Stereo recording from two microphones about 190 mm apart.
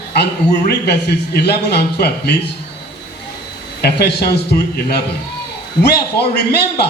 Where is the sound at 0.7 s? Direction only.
60° left (ahead or behind).